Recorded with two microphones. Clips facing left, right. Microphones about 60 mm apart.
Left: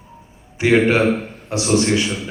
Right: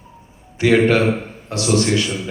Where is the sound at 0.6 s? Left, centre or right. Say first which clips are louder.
Even; left.